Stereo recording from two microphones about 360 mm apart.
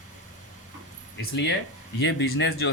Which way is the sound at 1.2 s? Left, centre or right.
Left.